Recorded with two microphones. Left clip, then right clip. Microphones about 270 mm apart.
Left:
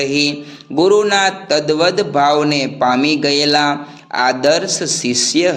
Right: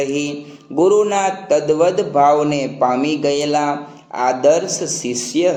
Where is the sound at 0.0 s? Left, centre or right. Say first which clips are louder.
Left 4 dB; left.